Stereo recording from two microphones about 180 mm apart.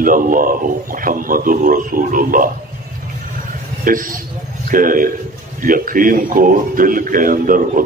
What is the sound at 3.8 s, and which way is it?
A man's voice, 50° right (ahead or behind).